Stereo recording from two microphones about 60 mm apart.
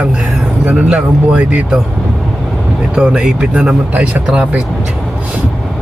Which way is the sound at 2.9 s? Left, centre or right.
Centre.